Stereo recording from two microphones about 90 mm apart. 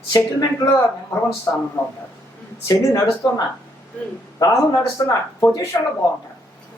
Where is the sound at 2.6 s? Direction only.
40° left (ahead or behind).